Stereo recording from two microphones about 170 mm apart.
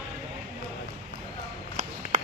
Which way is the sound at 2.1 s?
45° right (ahead or behind).